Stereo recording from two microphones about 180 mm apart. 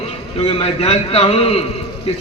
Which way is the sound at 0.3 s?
30° left (ahead or behind).